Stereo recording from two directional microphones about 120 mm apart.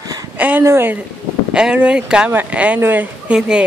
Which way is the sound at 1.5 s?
10° right (ahead or behind).